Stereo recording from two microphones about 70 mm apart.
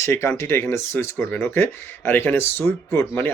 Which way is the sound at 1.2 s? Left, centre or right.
Left.